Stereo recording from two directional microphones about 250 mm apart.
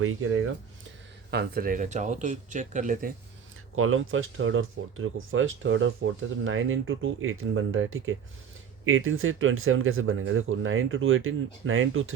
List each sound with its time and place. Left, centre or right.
0.0 s speech: right
1.3 s speech: right
3.8 s speech: right